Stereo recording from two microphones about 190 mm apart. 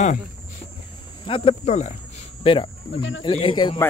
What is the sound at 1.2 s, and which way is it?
Speech, 30° left (ahead or behind).